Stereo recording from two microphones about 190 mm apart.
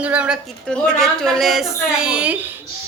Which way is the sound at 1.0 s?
Centre (ahead or behind).